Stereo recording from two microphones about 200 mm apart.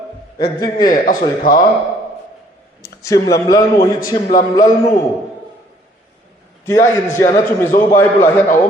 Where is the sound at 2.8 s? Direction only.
15° left (ahead or behind).